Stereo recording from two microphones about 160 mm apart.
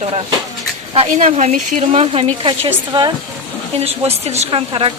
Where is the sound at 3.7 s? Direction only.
40° right (ahead or behind).